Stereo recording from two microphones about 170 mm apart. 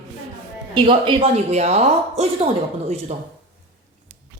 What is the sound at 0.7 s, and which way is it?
A woman's voice, 30° right (ahead or behind).